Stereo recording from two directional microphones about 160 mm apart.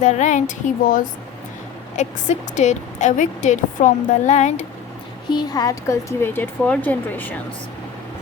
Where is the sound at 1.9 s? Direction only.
45° left (ahead or behind).